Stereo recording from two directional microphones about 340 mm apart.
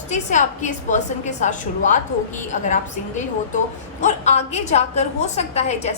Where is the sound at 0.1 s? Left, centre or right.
Left.